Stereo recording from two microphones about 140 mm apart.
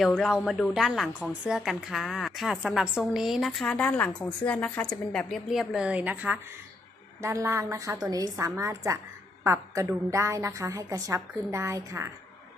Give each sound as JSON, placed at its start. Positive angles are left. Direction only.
{"t": 0.3, "sound": "a woman's voice", "side_deg": -5}
{"t": 7.2, "sound": "a woman's voice", "side_deg": -20}